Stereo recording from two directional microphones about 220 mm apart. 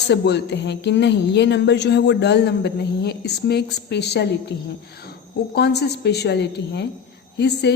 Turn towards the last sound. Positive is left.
turn(degrees=50)  # may be behind; listen again after turning